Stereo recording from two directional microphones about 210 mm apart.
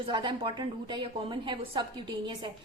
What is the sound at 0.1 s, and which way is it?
A woman's voice, 20° right (ahead or behind).